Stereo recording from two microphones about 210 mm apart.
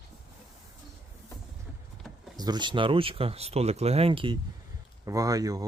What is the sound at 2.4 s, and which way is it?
Speech, 20° right (ahead or behind).